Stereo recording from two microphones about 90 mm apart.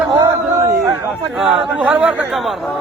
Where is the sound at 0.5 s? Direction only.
35° right (ahead or behind).